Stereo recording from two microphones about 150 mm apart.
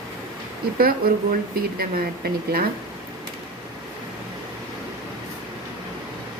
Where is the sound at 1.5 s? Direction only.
80° right.